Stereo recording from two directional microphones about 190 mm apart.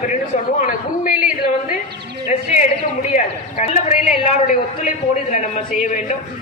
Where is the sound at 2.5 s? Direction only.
40° left (ahead or behind).